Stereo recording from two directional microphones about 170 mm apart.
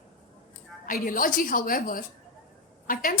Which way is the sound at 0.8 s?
55° left (ahead or behind).